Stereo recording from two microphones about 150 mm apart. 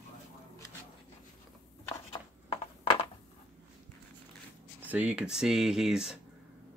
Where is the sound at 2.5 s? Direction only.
40° left (ahead or behind).